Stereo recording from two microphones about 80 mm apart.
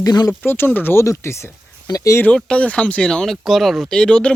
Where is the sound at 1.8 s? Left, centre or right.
Left.